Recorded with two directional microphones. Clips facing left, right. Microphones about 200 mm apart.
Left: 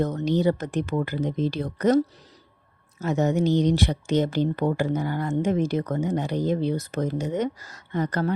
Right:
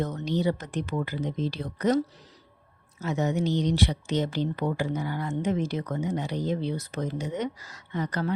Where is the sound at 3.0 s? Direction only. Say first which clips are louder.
Left 4 dB; 45° left (ahead or behind).